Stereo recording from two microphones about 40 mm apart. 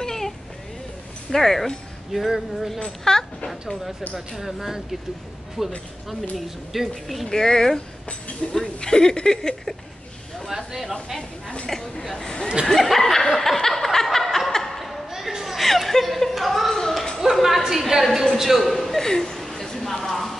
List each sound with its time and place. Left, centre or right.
0.0 s vehicle: centre
1.3 s speech: centre
3.1 s speech: centre
4.1 s speech: centre
7.2 s speech: centre
10.5 s speech: centre
11.6 s speech: centre
12.6 s laughter: centre
15.1 s a sound: centre